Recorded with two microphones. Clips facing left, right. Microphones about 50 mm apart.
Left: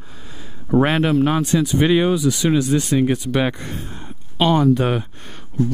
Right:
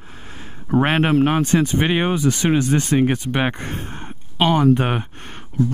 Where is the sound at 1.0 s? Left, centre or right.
Right.